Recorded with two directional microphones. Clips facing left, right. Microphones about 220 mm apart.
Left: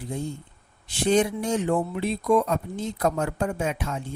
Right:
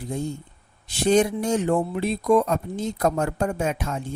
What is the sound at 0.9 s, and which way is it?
Speech, 45° right (ahead or behind).